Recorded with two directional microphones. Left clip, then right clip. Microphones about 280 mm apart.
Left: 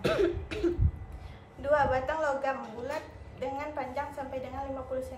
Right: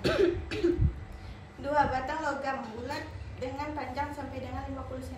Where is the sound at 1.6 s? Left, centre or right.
Centre.